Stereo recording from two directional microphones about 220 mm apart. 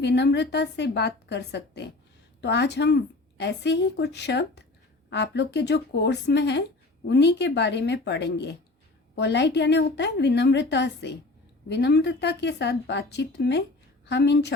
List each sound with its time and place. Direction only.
0.0 s speech: 50° left (ahead or behind)